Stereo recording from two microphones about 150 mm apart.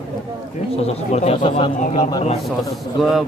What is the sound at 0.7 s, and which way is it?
Speech, 45° left (ahead or behind).